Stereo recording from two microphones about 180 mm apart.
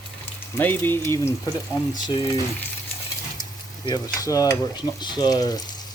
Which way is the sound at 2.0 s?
25° left (ahead or behind).